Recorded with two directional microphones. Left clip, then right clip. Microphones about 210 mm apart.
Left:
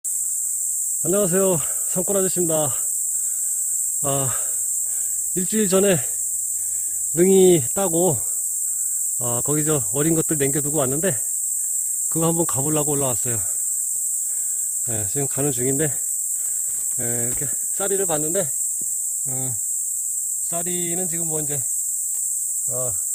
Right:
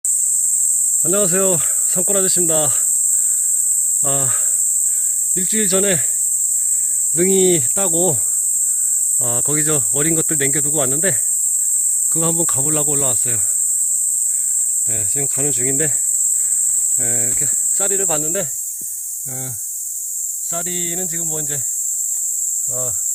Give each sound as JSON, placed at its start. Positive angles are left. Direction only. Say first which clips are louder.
{"t": 1.0, "sound": "speech", "louder": "even", "side_deg": 5}
{"t": 4.0, "sound": "speech", "louder": "right 4 dB", "side_deg": 15}
{"t": 7.2, "sound": "speech", "louder": "left 2 dB", "side_deg": 15}
{"t": 9.2, "sound": "speech", "louder": "left 1 dB", "side_deg": 5}
{"t": 14.9, "sound": "speech", "louder": "right 4 dB", "side_deg": 25}
{"t": 17.0, "sound": "speech", "louder": "right 6 dB", "side_deg": 5}
{"t": 20.5, "sound": "speech", "louder": "right 3 dB", "side_deg": 0}